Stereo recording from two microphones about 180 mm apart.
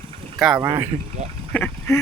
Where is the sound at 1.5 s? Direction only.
10° left (ahead or behind).